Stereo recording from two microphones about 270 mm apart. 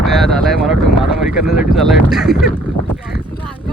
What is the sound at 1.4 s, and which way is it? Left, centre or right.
Boat, centre.